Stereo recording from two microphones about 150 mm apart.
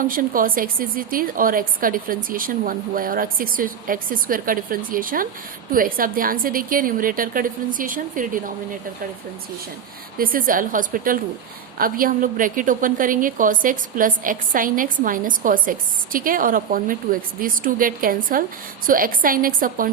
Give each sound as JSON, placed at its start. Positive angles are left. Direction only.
{"t": 0.0, "sound": "a woman's voice", "side_deg": -65}
{"t": 10.2, "sound": "a woman's voice", "side_deg": -70}